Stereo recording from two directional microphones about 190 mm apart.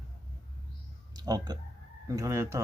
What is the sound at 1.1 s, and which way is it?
Speech, 20° right (ahead or behind).